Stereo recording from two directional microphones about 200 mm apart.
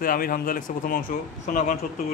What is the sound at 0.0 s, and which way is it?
Speech, 45° left (ahead or behind).